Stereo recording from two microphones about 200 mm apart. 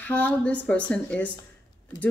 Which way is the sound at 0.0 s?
5° left (ahead or behind).